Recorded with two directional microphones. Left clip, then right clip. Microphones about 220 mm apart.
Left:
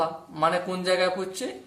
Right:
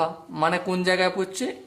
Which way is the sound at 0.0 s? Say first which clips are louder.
Right 1 dB; 35° right (ahead or behind).